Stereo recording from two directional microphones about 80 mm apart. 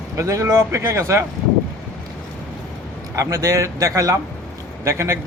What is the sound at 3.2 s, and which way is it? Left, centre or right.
A man's voice, right.